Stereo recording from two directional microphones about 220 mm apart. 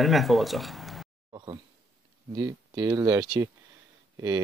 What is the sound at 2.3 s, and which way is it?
Speech, 15° right (ahead or behind).